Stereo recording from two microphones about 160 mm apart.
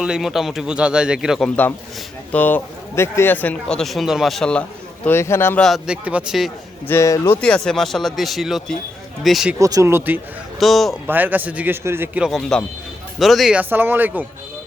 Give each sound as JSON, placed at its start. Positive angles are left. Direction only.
{"t": 0.0, "sound": "a man's voice", "side_deg": -5}
{"t": 5.0, "sound": "speech", "side_deg": 15}
{"t": 5.6, "sound": "a man's voice", "side_deg": 0}
{"t": 6.8, "sound": "speech", "side_deg": 20}
{"t": 7.4, "sound": "a man's voice", "side_deg": 5}
{"t": 9.6, "sound": "a man's voice", "side_deg": -20}
{"t": 10.6, "sound": "a man's voice", "side_deg": 0}
{"t": 11.0, "sound": "a man's voice", "side_deg": -10}